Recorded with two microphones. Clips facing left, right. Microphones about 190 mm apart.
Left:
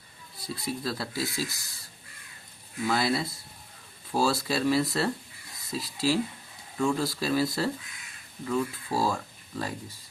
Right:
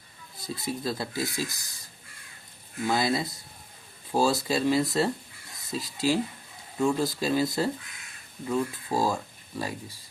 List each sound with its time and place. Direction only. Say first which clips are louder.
0.4 s speech: right 1 dB; 20° right (ahead or behind)
2.8 s speech: right 1 dB; 20° right (ahead or behind)